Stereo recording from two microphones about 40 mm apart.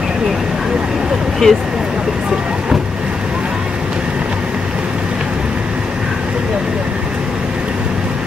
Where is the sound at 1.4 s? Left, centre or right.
Centre.